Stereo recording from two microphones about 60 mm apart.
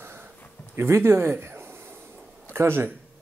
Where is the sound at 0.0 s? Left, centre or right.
Right.